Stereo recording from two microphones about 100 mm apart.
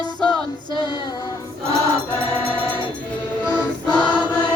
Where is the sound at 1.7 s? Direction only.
30° right (ahead or behind).